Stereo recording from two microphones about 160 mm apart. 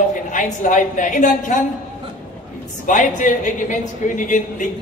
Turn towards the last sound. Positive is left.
turn(degrees=55)  # may be behind; listen again after turning